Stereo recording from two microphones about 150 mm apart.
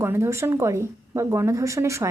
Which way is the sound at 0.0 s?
20° right (ahead or behind).